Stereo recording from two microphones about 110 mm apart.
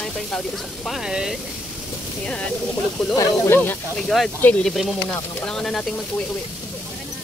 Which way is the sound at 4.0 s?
Centre (ahead or behind).